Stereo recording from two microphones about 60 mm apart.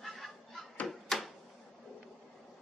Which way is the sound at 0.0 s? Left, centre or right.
Centre.